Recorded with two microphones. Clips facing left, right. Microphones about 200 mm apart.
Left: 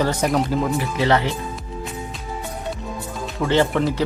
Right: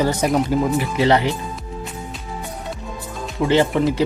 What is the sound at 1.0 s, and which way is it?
Speech, 20° right (ahead or behind).